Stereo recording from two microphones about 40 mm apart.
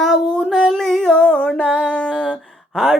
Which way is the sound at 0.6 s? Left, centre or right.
Centre.